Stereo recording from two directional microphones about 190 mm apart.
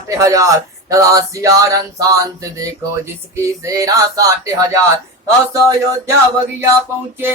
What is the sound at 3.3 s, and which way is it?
Speech, 15° right (ahead or behind).